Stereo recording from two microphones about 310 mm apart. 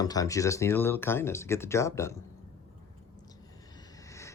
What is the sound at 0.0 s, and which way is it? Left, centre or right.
Speech, centre.